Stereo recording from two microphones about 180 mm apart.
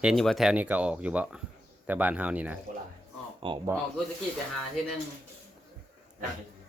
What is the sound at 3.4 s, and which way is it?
Speech, 30° right (ahead or behind).